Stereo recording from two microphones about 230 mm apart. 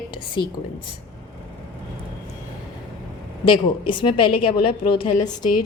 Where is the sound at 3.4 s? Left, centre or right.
Left.